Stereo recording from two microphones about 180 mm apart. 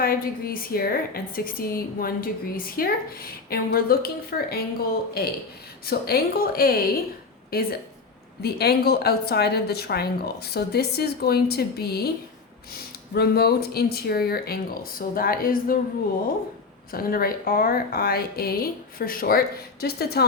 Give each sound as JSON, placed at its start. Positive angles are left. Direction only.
{"t": 0.0, "sound": "a woman's voice", "side_deg": 55}
{"t": 16.9, "sound": "a woman's voice", "side_deg": 55}